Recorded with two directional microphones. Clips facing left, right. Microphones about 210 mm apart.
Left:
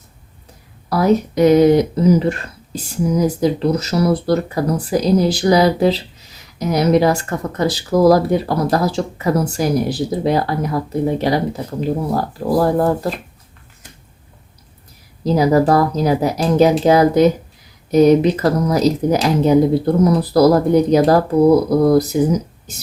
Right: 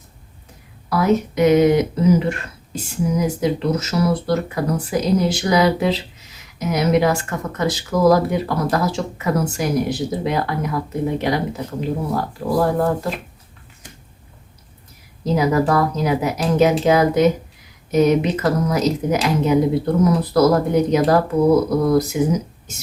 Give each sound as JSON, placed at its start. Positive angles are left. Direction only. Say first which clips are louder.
{"t": 0.9, "sound": "speech", "louder": "left 3 dB", "side_deg": 35}
{"t": 15.2, "sound": "speech", "louder": "left 4 dB", "side_deg": 35}